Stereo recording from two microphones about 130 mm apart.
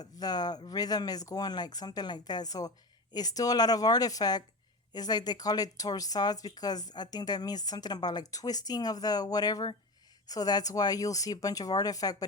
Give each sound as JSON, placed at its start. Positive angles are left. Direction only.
{"t": 0.0, "sound": "speech", "side_deg": 30}